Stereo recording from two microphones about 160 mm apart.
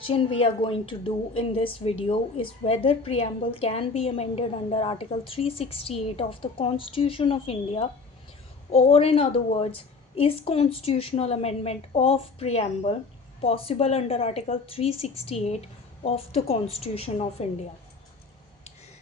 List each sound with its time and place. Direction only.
0.1 s a woman's voice: 35° left (ahead or behind)